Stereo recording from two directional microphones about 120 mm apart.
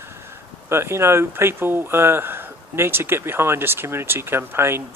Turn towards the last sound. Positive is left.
turn(degrees=-20)  # may be behind; listen again after turning